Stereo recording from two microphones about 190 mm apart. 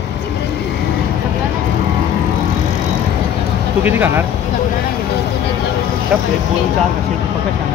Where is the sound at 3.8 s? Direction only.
10° right (ahead or behind).